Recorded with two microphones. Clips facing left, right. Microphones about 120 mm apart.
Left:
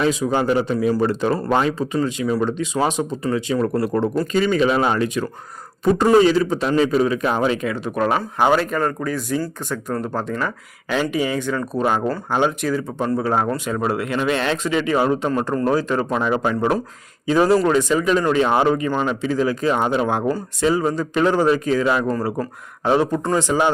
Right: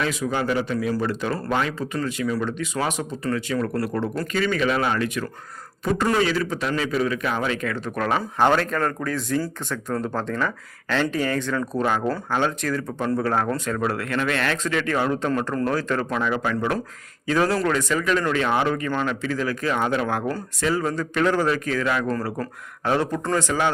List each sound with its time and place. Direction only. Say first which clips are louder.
0.0 s a man's voice: left 5 dB; 25° left (ahead or behind)
17.2 s speech: left 5 dB; 15° left (ahead or behind)